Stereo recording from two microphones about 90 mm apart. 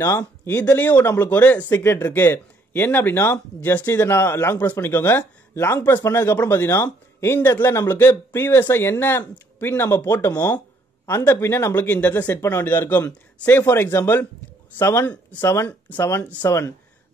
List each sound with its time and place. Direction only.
0.0 s speech: 40° left (ahead or behind)
0.5 s speech: 20° left (ahead or behind)